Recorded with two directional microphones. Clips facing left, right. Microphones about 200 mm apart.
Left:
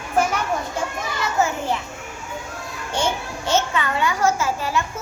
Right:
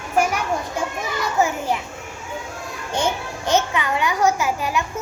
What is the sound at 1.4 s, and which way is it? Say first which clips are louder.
Children playing: right 1 dB; 15° right (ahead or behind).